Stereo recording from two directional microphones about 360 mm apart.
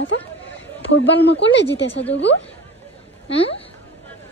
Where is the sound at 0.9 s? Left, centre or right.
Left.